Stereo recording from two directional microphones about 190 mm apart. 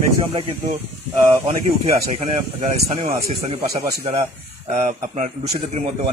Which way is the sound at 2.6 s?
35° right (ahead or behind).